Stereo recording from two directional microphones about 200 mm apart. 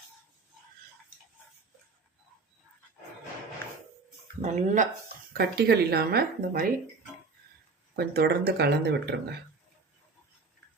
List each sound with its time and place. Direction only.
4.4 s speech: 35° right (ahead or behind)
5.3 s speech: 50° right (ahead or behind)
7.9 s speech: 55° right (ahead or behind)